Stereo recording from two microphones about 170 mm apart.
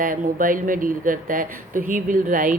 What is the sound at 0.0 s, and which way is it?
A woman's voice, 50° right (ahead or behind).